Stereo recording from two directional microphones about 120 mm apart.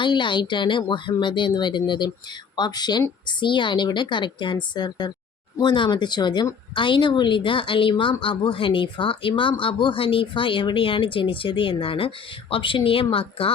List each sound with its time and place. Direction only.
0.0 s speech: 40° left (ahead or behind)